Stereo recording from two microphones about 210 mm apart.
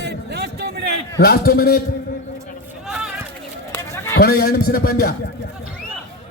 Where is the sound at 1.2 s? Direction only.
50° left (ahead or behind).